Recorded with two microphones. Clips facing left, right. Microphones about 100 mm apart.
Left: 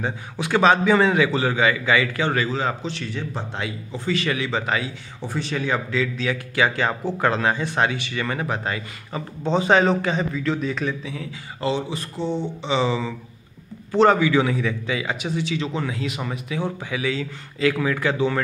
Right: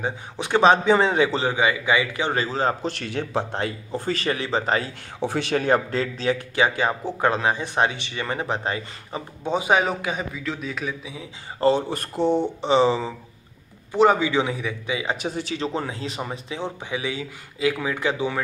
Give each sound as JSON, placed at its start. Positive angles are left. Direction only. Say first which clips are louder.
{"t": 0.0, "sound": "speech", "louder": "left 1 dB", "side_deg": -20}
{"t": 2.3, "sound": "speech", "louder": "even", "side_deg": -35}
{"t": 2.9, "sound": "speech", "louder": "right 3 dB", "side_deg": -60}
{"t": 3.5, "sound": "speech", "louder": "right 3 dB", "side_deg": -45}
{"t": 5.2, "sound": "speech", "louder": "right 3 dB", "side_deg": -75}
{"t": 6.2, "sound": "speech", "louder": "right 3 dB", "side_deg": -25}
{"t": 9.4, "sound": "a man's voice", "louder": "left 3 dB", "side_deg": -10}
{"t": 11.6, "sound": "speech", "louder": "right 4 dB", "side_deg": -50}
{"t": 13.9, "sound": "speech", "louder": "left 2 dB", "side_deg": -15}
{"t": 15.1, "sound": "speech", "louder": "left 2 dB", "side_deg": -40}